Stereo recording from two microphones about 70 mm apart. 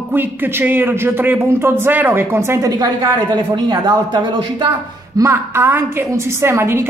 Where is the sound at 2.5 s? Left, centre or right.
Right.